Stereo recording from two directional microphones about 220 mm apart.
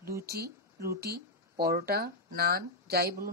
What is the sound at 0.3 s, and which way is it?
Speech, 45° right (ahead or behind).